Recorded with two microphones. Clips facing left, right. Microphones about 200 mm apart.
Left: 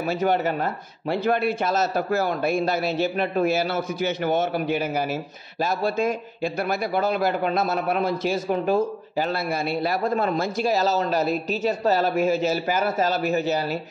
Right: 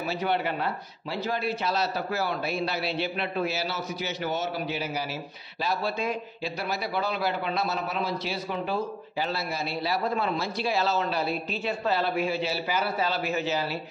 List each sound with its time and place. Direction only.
0.0 s a man's voice: 45° left (ahead or behind)
1.1 s a man's voice: 60° left (ahead or behind); by 13.7 s 40° left (ahead or behind)